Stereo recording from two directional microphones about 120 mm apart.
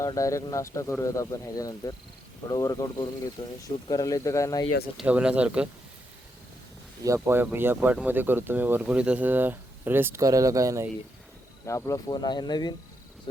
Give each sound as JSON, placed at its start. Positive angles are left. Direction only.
{"t": 0.0, "sound": "speech", "side_deg": 25}
{"t": 3.4, "sound": "speech", "side_deg": 40}
{"t": 3.8, "sound": "speech", "side_deg": 30}
{"t": 5.0, "sound": "speech", "side_deg": -10}
{"t": 7.0, "sound": "speech", "side_deg": -25}
{"t": 11.6, "sound": "speech", "side_deg": 25}